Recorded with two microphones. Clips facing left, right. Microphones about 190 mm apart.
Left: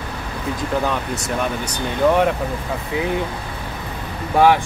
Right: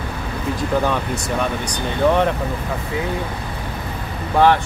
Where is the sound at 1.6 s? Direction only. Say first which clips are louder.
Left 1 dB; 10° left (ahead or behind).